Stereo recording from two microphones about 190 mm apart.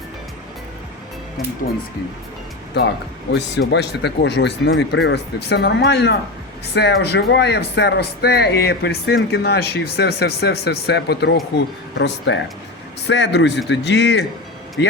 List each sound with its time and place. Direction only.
3.3 s speech: 65° left (ahead or behind)